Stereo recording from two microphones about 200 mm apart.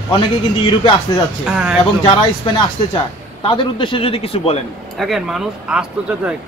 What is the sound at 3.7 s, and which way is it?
Speech, 25° left (ahead or behind).